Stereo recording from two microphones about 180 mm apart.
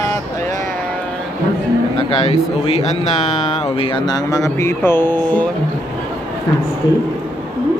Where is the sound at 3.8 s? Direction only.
25° left (ahead or behind).